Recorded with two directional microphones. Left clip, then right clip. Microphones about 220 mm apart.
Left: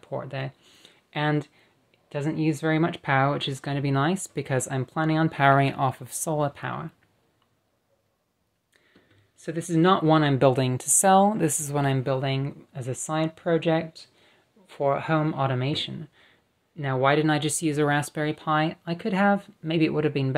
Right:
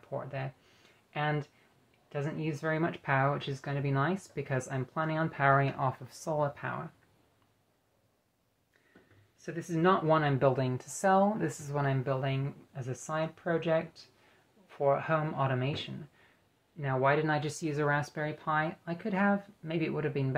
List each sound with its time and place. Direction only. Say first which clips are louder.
0.0 s speech: left 6 dB; 60° left (ahead or behind)
9.4 s speech: left 7 dB; 55° left (ahead or behind)